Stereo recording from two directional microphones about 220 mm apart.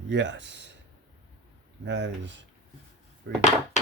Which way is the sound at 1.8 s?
55° right (ahead or behind).